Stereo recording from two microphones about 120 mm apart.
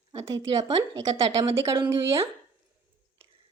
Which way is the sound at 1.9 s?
20° right (ahead or behind).